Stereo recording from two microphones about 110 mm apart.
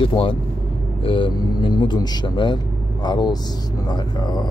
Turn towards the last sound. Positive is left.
turn(degrees=40)  # may be behind; listen again after turning